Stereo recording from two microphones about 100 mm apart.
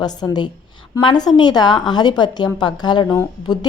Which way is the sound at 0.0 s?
45° left (ahead or behind).